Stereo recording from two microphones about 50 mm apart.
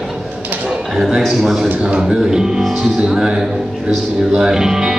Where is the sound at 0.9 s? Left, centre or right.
Centre.